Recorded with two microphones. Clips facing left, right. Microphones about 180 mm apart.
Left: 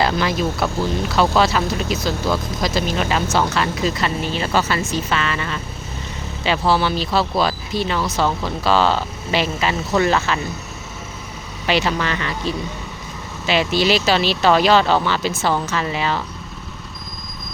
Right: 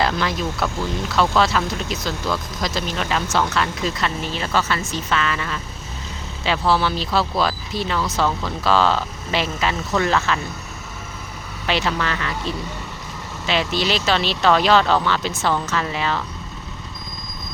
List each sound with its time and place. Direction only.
0.2 s speech: 5° left (ahead or behind)
11.6 s speech: 5° left (ahead or behind)
13.5 s speech: 5° left (ahead or behind)